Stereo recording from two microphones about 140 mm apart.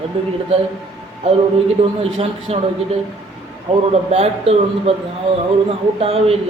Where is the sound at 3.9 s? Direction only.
50° right (ahead or behind).